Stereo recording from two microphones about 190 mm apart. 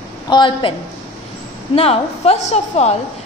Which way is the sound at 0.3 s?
25° left (ahead or behind).